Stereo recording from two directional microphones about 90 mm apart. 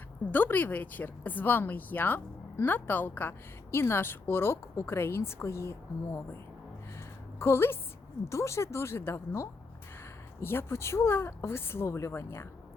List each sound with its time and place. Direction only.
0.3 s a woman's voice: 20° left (ahead or behind)